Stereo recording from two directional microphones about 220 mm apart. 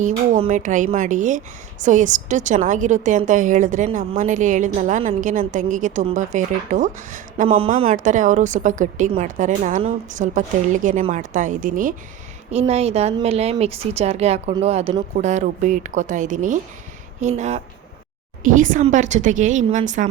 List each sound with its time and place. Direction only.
0.0 s a woman's voice: 30° right (ahead or behind)